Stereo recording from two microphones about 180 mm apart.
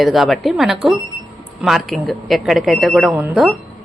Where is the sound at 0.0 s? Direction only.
Centre (ahead or behind).